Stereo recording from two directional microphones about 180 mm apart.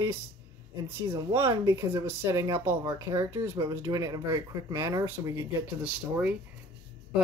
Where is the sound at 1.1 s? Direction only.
15° right (ahead or behind).